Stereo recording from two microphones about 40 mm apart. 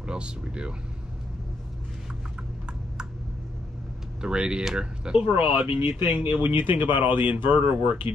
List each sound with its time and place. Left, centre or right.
0.0 s speech: right
4.2 s speech: right
5.8 s speech: right
6.0 s speech: right
6.4 s speech: right